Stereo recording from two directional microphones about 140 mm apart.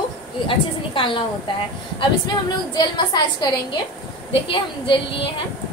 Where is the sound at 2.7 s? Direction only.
30° left (ahead or behind).